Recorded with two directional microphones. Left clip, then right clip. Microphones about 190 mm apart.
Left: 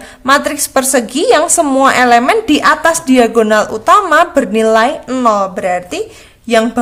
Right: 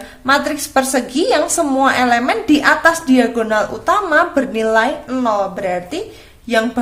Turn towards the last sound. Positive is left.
turn(degrees=35)  # may be behind; listen again after turning